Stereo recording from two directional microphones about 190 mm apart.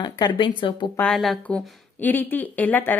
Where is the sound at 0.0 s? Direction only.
25° left (ahead or behind).